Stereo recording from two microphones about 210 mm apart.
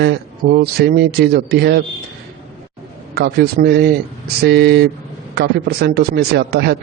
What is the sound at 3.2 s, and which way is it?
Speech, 50° right (ahead or behind).